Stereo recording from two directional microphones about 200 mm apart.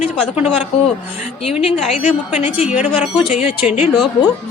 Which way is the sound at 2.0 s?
10° right (ahead or behind).